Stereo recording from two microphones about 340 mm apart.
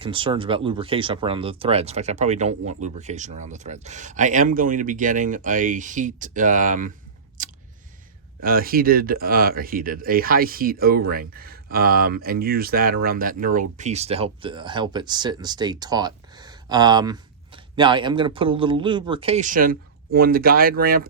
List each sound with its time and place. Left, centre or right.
0.0 s speech: centre
7.4 s a sound: right
8.4 s speech: right